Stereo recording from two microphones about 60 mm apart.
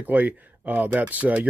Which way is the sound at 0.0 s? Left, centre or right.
Right.